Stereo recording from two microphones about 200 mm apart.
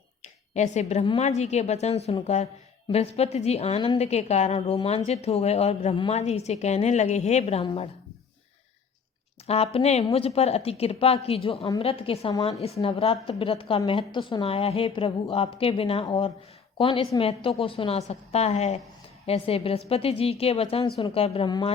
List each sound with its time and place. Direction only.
0.2 s a woman's voice: 35° left (ahead or behind)
9.5 s a woman's voice: 30° left (ahead or behind)